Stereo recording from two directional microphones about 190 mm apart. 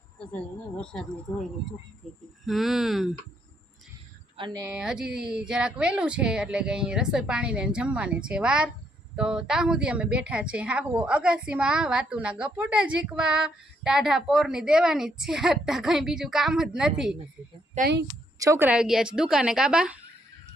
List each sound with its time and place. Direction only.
2.5 s a woman's voice: centre (ahead or behind)
4.4 s speech: 20° right (ahead or behind)
4.7 s a woman's voice: 5° right (ahead or behind)
17.7 s speech: 60° right (ahead or behind)
18.3 s a woman's voice: 15° right (ahead or behind)